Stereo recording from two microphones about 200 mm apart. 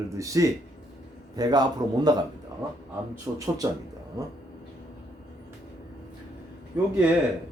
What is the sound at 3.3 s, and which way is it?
Speech, 20° right (ahead or behind).